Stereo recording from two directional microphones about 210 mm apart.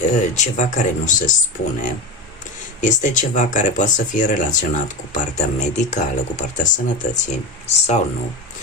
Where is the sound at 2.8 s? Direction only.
35° left (ahead or behind).